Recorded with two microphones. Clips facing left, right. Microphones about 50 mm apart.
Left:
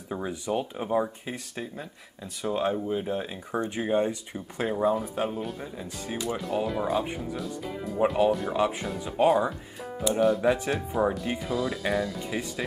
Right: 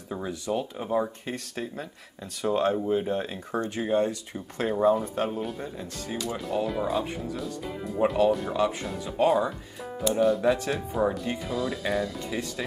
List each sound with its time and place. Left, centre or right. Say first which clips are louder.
0.1 s speech: even; centre
0.8 s speech: even; centre
3.6 s speech: even; centre
6.0 s speech: left 1 dB; centre
6.3 s speech: even; centre
8.5 s speech: even; centre